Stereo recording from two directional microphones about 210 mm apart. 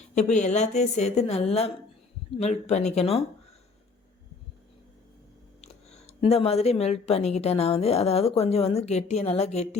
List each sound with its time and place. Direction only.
0.1 s a woman's voice: 35° left (ahead or behind)
5.6 s speech: 30° left (ahead or behind)